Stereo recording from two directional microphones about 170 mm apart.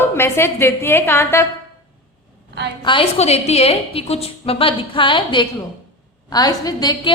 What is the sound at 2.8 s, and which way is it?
A woman's voice, 30° left (ahead or behind).